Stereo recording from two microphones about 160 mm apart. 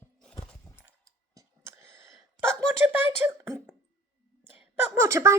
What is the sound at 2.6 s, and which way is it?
Speech, 15° right (ahead or behind).